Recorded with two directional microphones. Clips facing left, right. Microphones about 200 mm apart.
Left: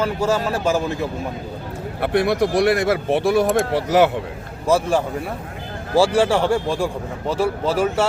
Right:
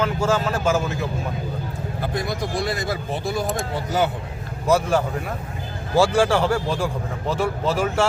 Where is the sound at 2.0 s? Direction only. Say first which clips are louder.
Left 9 dB; 70° left (ahead or behind).